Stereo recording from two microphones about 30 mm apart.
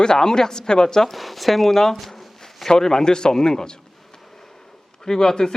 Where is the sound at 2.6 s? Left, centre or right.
Centre.